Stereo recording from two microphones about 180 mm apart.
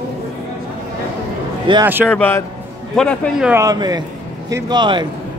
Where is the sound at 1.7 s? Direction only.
25° right (ahead or behind).